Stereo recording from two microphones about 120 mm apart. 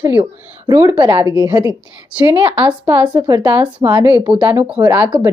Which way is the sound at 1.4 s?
35° right (ahead or behind).